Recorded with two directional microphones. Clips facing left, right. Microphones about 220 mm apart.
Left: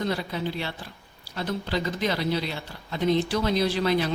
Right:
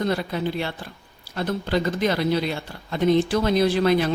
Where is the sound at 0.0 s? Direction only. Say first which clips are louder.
Right 4 dB; 50° right (ahead or behind).